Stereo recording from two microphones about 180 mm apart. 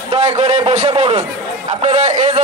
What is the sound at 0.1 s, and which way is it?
A man's voice, 35° right (ahead or behind).